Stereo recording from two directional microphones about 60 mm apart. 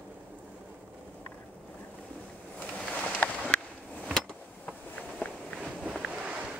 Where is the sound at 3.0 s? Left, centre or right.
Left.